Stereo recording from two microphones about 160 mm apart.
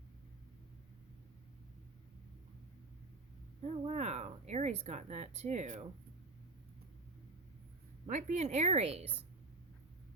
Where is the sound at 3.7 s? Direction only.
40° right (ahead or behind).